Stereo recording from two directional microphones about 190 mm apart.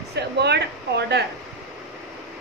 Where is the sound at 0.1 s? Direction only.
60° right (ahead or behind).